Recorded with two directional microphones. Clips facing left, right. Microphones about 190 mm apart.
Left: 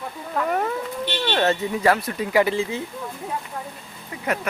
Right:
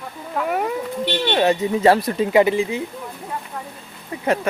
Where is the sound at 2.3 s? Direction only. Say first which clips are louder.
Right 3 dB; 20° right (ahead or behind).